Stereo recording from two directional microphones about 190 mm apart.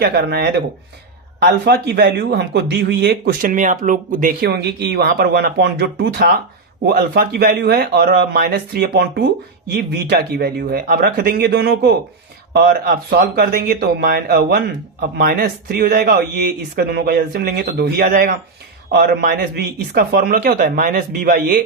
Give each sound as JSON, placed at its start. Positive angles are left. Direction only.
{"t": 0.0, "sound": "speech", "side_deg": -55}